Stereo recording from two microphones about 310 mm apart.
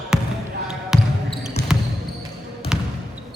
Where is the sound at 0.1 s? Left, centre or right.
Centre.